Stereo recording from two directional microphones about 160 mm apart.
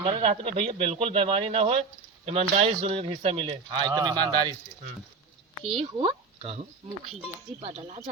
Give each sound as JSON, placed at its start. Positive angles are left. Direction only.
{"t": 0.0, "sound": "speech", "side_deg": -40}
{"t": 3.7, "sound": "speech", "side_deg": -25}
{"t": 5.7, "sound": "speech", "side_deg": -35}
{"t": 7.6, "sound": "speech", "side_deg": -35}